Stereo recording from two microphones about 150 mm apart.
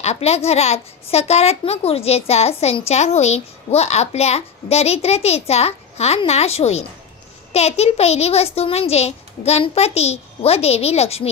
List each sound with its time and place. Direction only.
0.0 s a child's voice: 45° left (ahead or behind)